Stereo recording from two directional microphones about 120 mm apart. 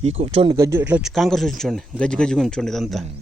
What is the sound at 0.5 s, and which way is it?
Speech, 25° right (ahead or behind).